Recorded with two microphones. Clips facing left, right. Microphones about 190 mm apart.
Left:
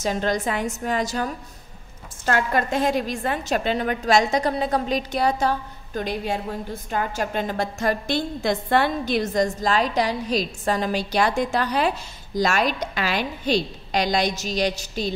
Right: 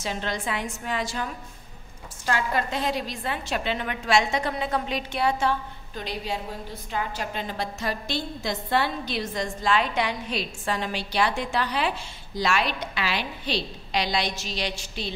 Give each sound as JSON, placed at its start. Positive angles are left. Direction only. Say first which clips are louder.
{"t": 0.0, "sound": "a woman's voice", "louder": "left 7 dB", "side_deg": 40}